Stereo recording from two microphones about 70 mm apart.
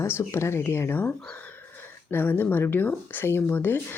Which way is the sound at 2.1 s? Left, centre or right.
Left.